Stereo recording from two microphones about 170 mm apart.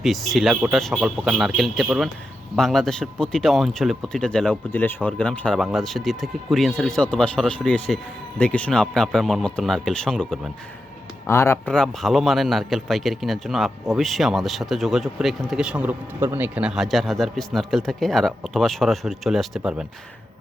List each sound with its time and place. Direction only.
0.0 s a man's voice: centre (ahead or behind)
11.3 s a man's voice: 15° left (ahead or behind); by 19.8 s 5° right (ahead or behind)